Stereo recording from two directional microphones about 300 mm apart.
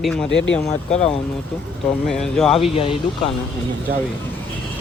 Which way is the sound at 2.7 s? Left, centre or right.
Centre.